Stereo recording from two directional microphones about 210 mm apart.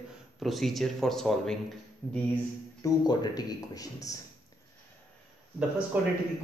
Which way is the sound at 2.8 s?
20° left (ahead or behind).